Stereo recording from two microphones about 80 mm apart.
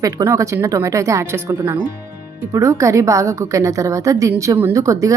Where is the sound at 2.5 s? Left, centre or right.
Right.